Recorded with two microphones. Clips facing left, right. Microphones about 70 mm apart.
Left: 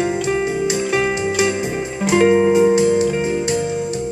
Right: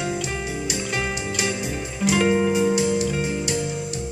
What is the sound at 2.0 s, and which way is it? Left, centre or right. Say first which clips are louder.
Music: left 6 dB; left.